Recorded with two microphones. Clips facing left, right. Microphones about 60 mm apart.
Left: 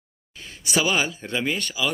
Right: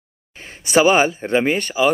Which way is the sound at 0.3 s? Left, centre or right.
Right.